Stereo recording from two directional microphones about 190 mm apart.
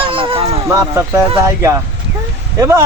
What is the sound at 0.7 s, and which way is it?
A man's voice, 15° right (ahead or behind).